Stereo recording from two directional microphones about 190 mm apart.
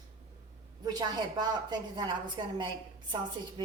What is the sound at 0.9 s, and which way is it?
A woman's voice, 20° right (ahead or behind).